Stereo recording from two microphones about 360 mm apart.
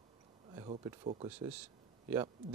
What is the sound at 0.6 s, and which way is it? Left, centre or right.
Speech, centre.